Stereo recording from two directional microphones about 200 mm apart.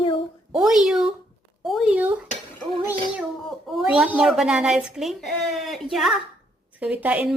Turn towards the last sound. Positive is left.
turn(degrees=-5)  # may be behind; listen again after turning